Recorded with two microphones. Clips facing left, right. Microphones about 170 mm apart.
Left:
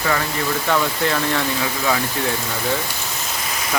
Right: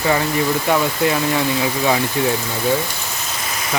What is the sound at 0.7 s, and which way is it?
Speech, 15° right (ahead or behind).